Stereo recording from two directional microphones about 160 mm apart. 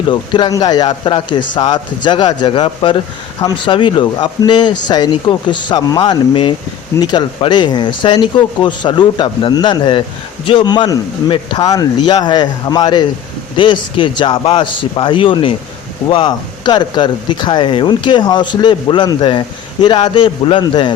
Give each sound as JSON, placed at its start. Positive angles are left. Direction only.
{"t": 0.1, "sound": "speech", "side_deg": 30}